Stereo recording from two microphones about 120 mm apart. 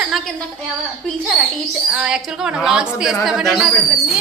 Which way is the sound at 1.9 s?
10° right (ahead or behind).